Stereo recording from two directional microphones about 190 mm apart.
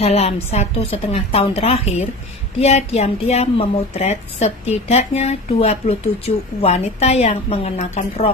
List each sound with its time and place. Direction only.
0.0 s a woman's voice: 35° left (ahead or behind)